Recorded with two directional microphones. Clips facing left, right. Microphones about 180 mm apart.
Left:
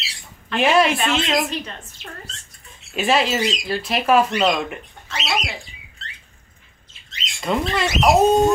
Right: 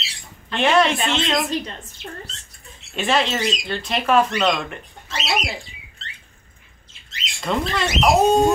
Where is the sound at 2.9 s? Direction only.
5° left (ahead or behind).